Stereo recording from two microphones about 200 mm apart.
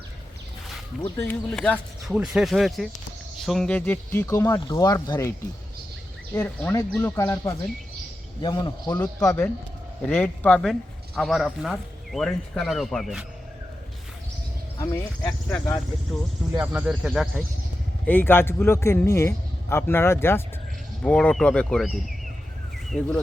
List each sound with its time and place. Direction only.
1.1 s speech: 10° left (ahead or behind)
6.3 s a man's voice: 10° left (ahead or behind)
14.8 s speech: 15° left (ahead or behind)
16.6 s speech: 5° right (ahead or behind)
18.0 s speech: 10° left (ahead or behind)